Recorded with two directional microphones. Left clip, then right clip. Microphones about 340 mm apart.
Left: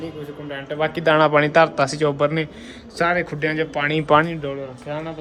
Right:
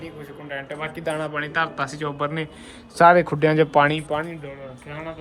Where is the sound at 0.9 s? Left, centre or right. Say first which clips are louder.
Left 12 dB; left.